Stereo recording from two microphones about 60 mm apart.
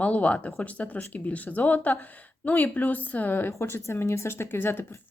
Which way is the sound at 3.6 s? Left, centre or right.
Left.